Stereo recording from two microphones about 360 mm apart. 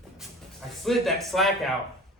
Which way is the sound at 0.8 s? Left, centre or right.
Centre.